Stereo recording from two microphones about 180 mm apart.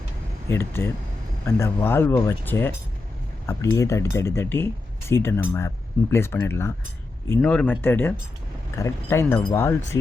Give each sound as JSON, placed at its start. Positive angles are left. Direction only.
{"t": 0.4, "sound": "speech", "side_deg": 10}